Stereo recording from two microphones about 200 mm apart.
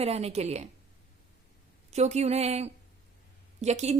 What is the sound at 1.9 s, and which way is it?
A woman's voice, 35° right (ahead or behind).